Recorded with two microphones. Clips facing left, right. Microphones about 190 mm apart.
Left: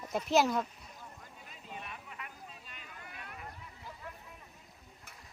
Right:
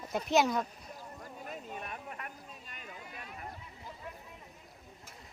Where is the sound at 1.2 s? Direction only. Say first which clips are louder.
Right 8 dB; 50° right (ahead or behind).